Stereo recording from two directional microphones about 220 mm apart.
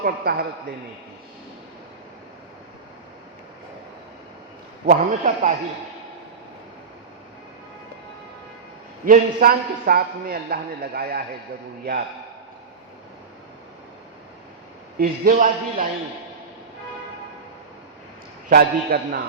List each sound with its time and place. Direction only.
0.0 s a man's voice: 45° right (ahead or behind)
4.9 s a man's voice: 35° right (ahead or behind)
9.0 s a man's voice: 40° right (ahead or behind)
14.9 s a man's voice: 40° right (ahead or behind)
18.4 s a man's voice: 40° right (ahead or behind)